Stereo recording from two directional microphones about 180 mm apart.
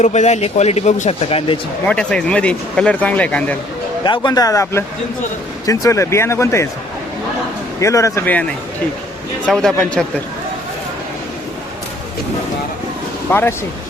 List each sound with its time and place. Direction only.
0.0 s speech: 40° left (ahead or behind)
1.8 s speech: 5° left (ahead or behind)
4.0 s speech: 25° left (ahead or behind)
7.8 s speech: 15° left (ahead or behind)
9.5 s a man's voice: 5° left (ahead or behind)
13.3 s speech: 15° left (ahead or behind)